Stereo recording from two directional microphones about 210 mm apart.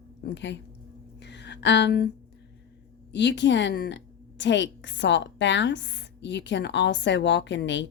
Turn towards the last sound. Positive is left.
turn(degrees=60)  # may be behind; listen again after turning